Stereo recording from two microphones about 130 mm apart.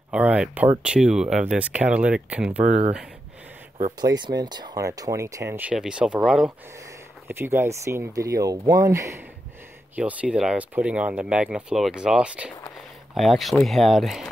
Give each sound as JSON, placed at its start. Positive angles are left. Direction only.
{"t": 0.1, "sound": "speech", "side_deg": -10}
{"t": 2.6, "sound": "speech", "side_deg": -65}
{"t": 4.0, "sound": "speech", "side_deg": -30}
{"t": 5.6, "sound": "speech", "side_deg": -10}
{"t": 7.2, "sound": "speech", "side_deg": -15}
{"t": 9.9, "sound": "speech", "side_deg": -10}